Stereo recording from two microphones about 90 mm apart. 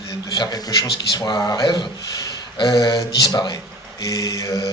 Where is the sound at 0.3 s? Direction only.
50° left (ahead or behind).